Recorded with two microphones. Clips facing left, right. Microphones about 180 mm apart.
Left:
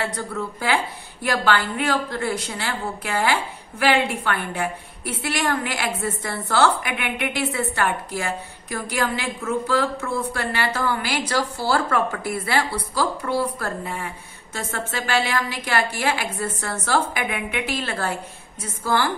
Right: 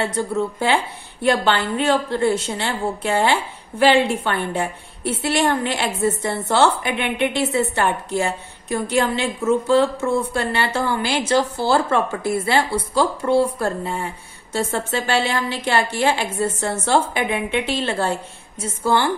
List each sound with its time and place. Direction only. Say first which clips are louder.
0.0 s a woman's voice: right 6 dB; 25° right (ahead or behind)